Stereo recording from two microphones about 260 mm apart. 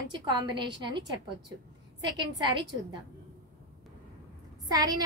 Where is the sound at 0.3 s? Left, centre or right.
Centre.